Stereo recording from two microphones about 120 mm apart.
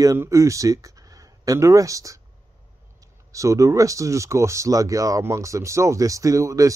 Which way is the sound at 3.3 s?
25° right (ahead or behind).